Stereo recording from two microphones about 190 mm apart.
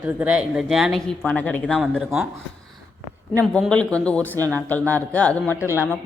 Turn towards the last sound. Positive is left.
turn(degrees=15)  # may be behind; listen again after turning